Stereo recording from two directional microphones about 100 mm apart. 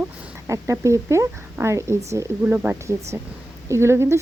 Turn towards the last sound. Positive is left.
turn(degrees=-25)  # may be behind; listen again after turning